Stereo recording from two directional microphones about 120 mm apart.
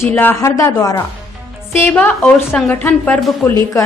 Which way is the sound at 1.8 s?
20° left (ahead or behind).